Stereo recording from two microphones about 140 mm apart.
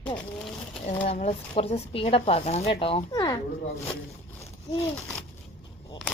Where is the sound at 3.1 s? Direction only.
25° left (ahead or behind).